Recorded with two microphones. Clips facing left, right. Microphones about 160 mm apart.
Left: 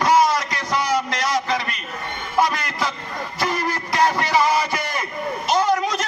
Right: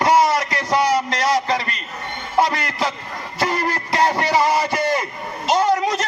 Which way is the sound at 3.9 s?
30° right (ahead or behind).